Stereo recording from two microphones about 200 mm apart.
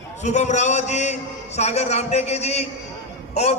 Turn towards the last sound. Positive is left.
turn(degrees=30)  # may be behind; listen again after turning